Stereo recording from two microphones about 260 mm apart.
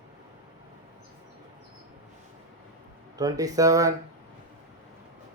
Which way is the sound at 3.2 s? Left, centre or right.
Centre.